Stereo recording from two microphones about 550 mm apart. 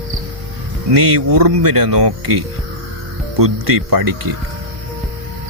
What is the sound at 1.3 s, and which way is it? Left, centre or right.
Speech, right.